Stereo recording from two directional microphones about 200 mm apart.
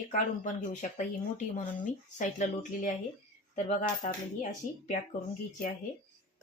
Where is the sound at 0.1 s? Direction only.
40° left (ahead or behind).